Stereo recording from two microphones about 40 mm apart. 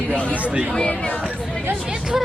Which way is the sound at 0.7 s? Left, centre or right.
Left.